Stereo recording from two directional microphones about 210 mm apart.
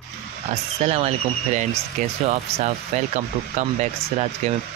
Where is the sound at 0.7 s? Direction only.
35° right (ahead or behind).